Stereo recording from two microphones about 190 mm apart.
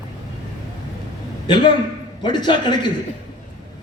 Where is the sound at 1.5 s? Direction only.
25° left (ahead or behind).